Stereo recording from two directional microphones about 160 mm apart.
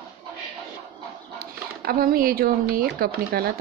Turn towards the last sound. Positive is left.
turn(degrees=-70)  # may be behind; listen again after turning